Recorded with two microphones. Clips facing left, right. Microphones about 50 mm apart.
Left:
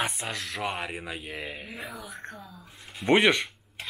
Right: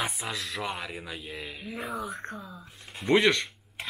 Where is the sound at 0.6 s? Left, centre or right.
Left.